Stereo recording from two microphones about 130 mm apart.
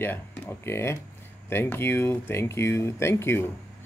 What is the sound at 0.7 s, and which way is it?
Speech, 20° left (ahead or behind).